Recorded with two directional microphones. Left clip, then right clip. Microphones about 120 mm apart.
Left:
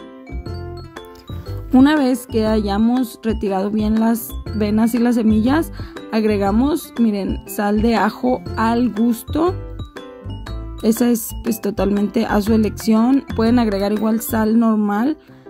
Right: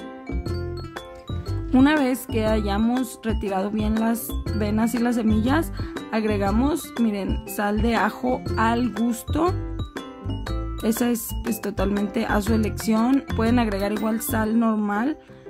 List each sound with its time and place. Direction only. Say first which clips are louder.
1.9 s speech: left 4 dB; 30° left (ahead or behind)
10.8 s speech: left 7 dB; 40° left (ahead or behind)
11.4 s music: left 6 dB; centre (ahead or behind)
12.0 s speech: left 5 dB; 45° left (ahead or behind)